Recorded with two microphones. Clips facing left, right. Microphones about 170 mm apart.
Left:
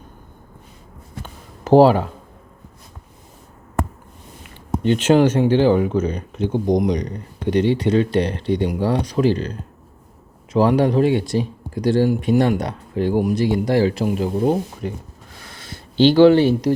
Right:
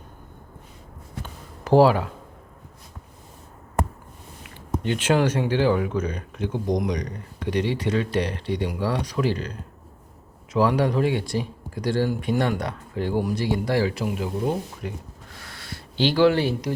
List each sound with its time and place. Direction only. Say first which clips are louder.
1.6 s speech: left 5 dB; 25° left (ahead or behind)
5.1 s speech: left 6 dB; 25° left (ahead or behind)
10.5 s speech: left 5 dB; 25° left (ahead or behind)
13.8 s speech: left 6 dB; 30° left (ahead or behind)
15.4 s a sound: left 2 dB; 20° left (ahead or behind)